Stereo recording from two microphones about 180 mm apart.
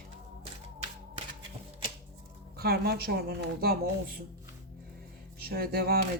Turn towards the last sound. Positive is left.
turn(degrees=-60)  # may be behind; listen again after turning